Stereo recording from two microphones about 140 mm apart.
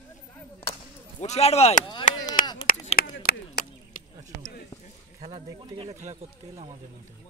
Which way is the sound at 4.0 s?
90° left.